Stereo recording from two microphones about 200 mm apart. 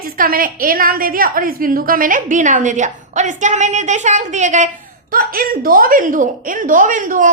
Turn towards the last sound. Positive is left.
turn(degrees=-40)  # may be behind; listen again after turning